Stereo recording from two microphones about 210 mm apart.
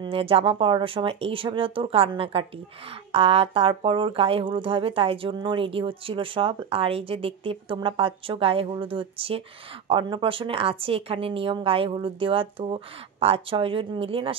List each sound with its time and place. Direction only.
0.0 s speech: 25° right (ahead or behind)